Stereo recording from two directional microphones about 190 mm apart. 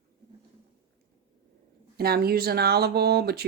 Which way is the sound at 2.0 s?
55° right (ahead or behind).